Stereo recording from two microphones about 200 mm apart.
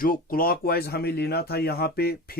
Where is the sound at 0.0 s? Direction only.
45° left (ahead or behind).